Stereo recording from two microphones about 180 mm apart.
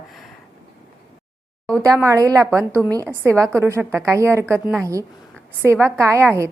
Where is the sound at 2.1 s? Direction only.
20° right (ahead or behind).